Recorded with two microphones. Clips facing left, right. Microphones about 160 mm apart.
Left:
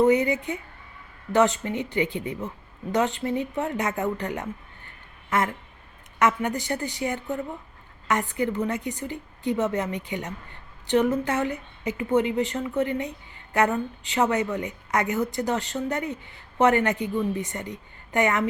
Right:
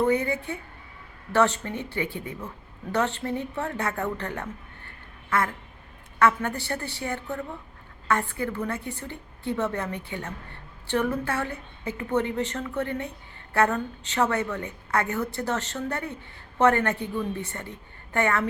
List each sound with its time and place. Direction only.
0.0 s a woman's voice: 15° left (ahead or behind)
6.1 s a woman's voice: 15° left (ahead or behind)